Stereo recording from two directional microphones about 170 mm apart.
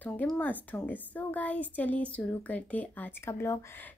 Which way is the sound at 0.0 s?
10° left (ahead or behind).